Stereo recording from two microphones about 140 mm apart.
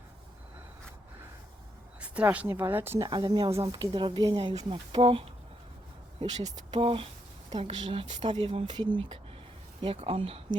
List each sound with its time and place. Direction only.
2.0 s speech: 10° right (ahead or behind)
3.1 s speech: 30° right (ahead or behind)
6.7 s speech: 40° right (ahead or behind)